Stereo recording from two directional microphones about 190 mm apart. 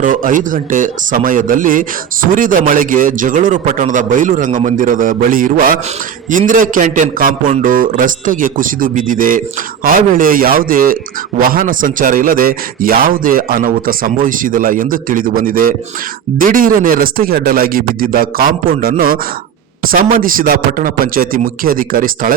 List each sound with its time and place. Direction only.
0.0 s speech: 45° right (ahead or behind)